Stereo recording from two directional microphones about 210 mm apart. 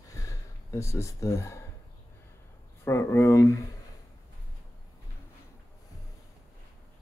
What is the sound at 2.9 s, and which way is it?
Speech, 10° left (ahead or behind).